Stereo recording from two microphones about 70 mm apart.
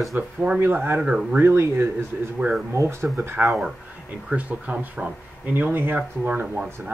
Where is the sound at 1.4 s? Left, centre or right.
Right.